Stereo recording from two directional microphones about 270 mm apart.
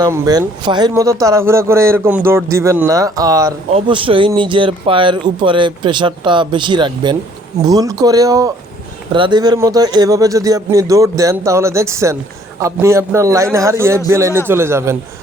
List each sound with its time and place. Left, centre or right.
0.0 s speech: centre